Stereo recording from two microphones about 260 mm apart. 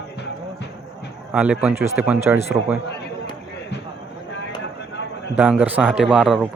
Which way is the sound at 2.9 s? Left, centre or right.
Left.